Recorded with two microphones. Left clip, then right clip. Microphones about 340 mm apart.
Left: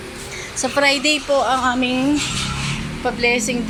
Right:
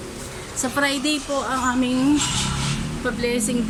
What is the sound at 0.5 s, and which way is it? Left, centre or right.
A woman's voice, centre.